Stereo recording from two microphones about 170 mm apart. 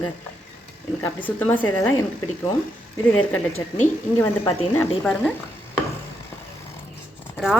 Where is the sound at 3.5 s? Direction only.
45° left (ahead or behind).